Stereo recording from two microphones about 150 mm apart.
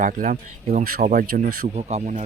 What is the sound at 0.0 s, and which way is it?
Speech, 60° right (ahead or behind).